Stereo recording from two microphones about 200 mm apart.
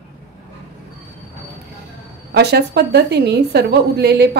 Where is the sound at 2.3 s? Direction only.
55° right (ahead or behind).